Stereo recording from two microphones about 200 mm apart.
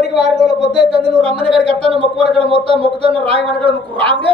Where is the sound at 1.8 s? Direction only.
30° right (ahead or behind).